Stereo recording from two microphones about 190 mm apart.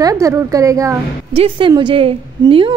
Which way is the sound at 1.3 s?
30° right (ahead or behind).